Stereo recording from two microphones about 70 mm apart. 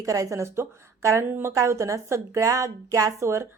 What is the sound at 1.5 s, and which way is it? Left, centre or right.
A woman's voice, right.